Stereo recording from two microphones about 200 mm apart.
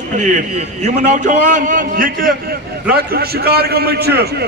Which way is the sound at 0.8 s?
35° right (ahead or behind).